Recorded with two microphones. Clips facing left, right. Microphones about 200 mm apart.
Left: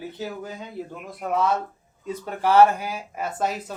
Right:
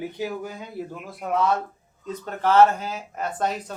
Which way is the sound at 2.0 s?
10° left (ahead or behind).